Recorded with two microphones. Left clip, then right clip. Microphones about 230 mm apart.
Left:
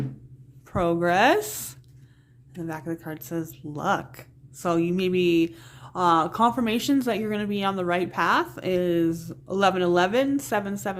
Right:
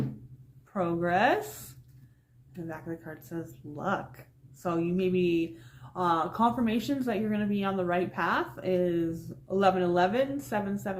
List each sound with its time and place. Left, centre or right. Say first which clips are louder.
0.7 s speech: left 6 dB; left
2.6 s speech: left 7 dB; left